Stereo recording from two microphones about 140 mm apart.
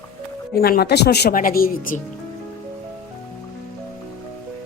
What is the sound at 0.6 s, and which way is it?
A woman's voice, 90° left.